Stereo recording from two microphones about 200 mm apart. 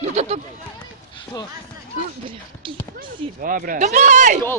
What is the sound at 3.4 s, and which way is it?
Speech, 45° right (ahead or behind).